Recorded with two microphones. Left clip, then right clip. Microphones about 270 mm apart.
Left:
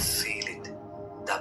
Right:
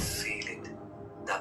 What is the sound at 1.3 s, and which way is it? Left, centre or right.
Hiccup, left.